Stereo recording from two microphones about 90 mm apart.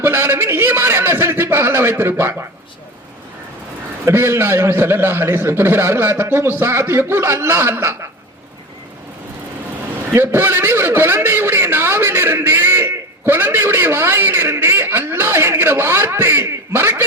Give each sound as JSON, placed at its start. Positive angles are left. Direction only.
{"t": 0.0, "sound": "a man's voice", "side_deg": -25}
{"t": 4.0, "sound": "a man's voice", "side_deg": -25}
{"t": 10.1, "sound": "a man's voice", "side_deg": -25}